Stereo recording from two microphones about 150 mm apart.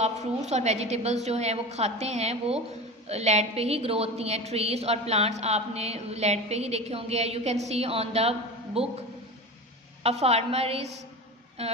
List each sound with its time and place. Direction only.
0.0 s a woman's voice: 50° right (ahead or behind)